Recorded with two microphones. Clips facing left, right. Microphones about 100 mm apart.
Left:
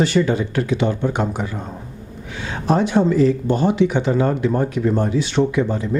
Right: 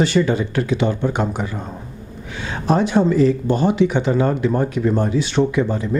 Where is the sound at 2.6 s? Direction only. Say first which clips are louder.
Even; 15° right (ahead or behind).